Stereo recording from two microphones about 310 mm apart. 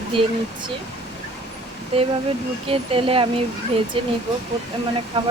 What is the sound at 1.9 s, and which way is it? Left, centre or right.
Speech, centre.